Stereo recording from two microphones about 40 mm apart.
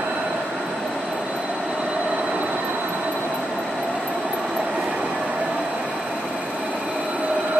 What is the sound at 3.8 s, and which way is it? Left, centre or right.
Train, right.